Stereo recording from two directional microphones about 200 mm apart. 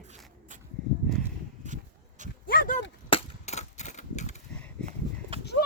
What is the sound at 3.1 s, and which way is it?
Cap gun, 30° left (ahead or behind).